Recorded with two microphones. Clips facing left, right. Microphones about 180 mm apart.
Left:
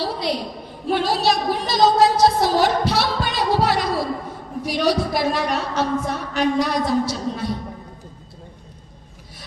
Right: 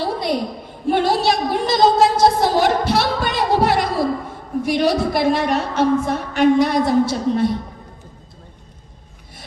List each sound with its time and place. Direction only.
0.0 s a sound: 50° right (ahead or behind)
1.8 s singing: 55° right (ahead or behind)
4.6 s a woman's voice: 55° right (ahead or behind)